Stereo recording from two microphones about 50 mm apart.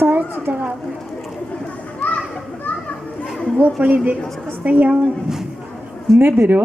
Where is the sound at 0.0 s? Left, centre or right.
Right.